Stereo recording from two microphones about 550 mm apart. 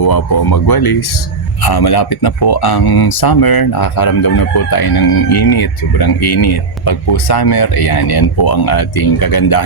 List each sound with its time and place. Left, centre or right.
0.0 s speech: left